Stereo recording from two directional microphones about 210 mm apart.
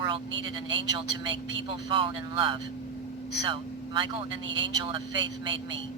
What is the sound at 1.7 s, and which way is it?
Speech, 25° right (ahead or behind).